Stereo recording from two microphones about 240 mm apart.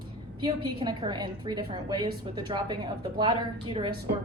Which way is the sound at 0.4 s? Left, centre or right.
Centre.